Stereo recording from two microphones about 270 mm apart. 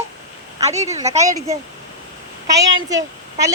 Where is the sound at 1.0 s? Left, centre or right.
Centre.